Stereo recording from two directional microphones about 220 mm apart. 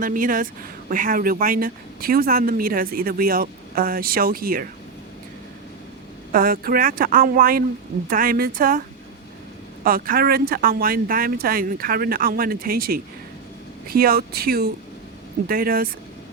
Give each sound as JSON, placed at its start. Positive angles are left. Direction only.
{"t": 0.0, "sound": "speech", "side_deg": -40}
{"t": 6.3, "sound": "speech", "side_deg": -40}
{"t": 9.8, "sound": "speech", "side_deg": -40}